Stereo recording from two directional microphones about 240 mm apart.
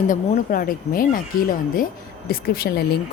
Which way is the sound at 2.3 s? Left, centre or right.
Left.